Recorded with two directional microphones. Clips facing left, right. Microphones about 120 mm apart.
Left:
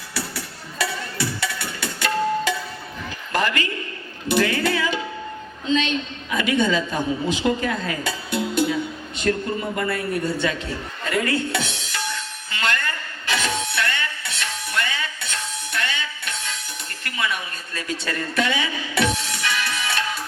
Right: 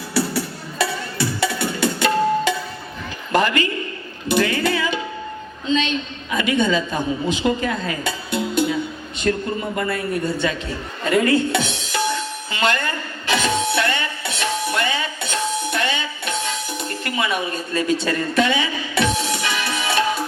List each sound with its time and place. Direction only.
0.1 s music: 30° right (ahead or behind)
3.3 s a sound: 20° right (ahead or behind)
4.3 s a woman's voice: 20° right (ahead or behind)
11.0 s music: 20° right (ahead or behind)